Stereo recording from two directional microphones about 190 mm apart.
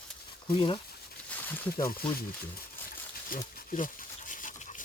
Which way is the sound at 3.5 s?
45° left (ahead or behind).